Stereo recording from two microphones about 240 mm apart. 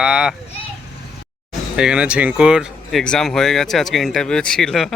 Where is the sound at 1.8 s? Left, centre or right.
Centre.